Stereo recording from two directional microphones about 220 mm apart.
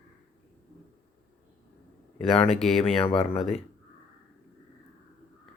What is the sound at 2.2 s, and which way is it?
Speech, 25° left (ahead or behind).